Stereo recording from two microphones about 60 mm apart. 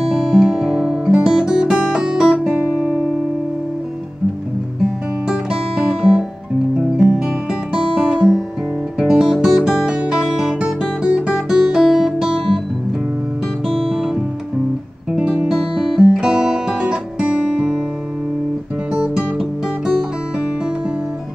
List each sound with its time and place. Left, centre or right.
0.0 s guitar: centre
2.6 s guitar: right
5.3 s music: centre
7.7 s guitar: centre
9.0 s music: centre
15.1 s music: centre